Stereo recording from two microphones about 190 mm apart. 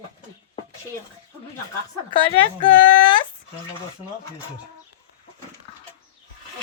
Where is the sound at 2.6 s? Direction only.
25° left (ahead or behind).